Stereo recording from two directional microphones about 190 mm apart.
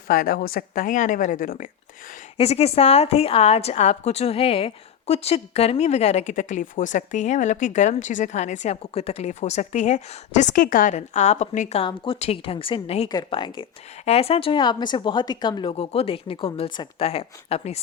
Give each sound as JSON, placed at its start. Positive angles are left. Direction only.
{"t": 0.1, "sound": "speech", "side_deg": 50}
{"t": 2.4, "sound": "a woman's voice", "side_deg": 35}